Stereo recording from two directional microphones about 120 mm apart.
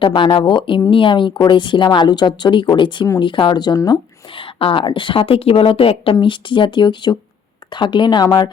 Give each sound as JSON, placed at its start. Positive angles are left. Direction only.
{"t": 0.0, "sound": "speech", "side_deg": 45}
{"t": 4.4, "sound": "speech", "side_deg": 45}